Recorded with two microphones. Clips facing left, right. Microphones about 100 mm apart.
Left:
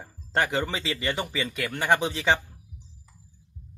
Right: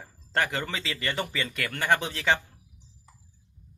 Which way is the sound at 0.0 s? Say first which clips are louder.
Left 2 dB; 20° left (ahead or behind).